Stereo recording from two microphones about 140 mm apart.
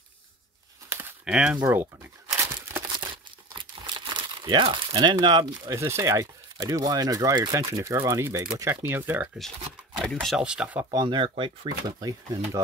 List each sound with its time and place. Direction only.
1.2 s crumpling: 5° right (ahead or behind)
2.9 s speech: 35° right (ahead or behind); by 9.3 s 15° right (ahead or behind)
9.9 s speech: centre (ahead or behind)
10.9 s speech: 30° right (ahead or behind)